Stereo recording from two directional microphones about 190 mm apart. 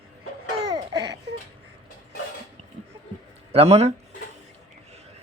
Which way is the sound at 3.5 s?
35° right (ahead or behind).